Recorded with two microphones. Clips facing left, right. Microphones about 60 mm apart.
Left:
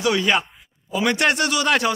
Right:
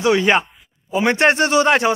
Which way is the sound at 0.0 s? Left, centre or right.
Right.